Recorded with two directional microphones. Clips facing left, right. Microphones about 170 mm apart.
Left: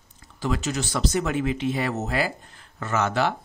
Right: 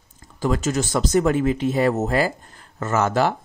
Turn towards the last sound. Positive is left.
turn(degrees=-45)  # may be behind; listen again after turning